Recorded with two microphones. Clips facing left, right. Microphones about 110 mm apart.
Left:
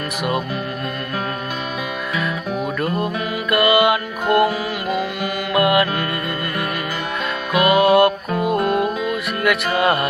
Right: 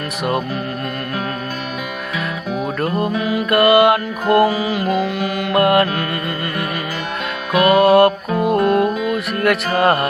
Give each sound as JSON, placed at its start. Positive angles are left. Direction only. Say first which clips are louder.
{"t": 3.0, "sound": "music", "louder": "right 4 dB", "side_deg": 0}
{"t": 3.5, "sound": "music", "louder": "right 3 dB", "side_deg": -50}
{"t": 4.8, "sound": "music", "louder": "right 4 dB", "side_deg": 5}
{"t": 5.5, "sound": "music", "louder": "right 2 dB", "side_deg": -45}
{"t": 7.5, "sound": "music", "louder": "right 3 dB", "side_deg": 5}
{"t": 7.8, "sound": "music", "louder": "right 2 dB", "side_deg": -45}
{"t": 8.3, "sound": "music", "louder": "right 3 dB", "side_deg": 0}
{"t": 9.1, "sound": "music", "louder": "right 2 dB", "side_deg": -45}